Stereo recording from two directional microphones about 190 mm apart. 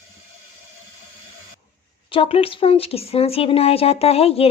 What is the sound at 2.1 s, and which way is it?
Speech, 30° left (ahead or behind).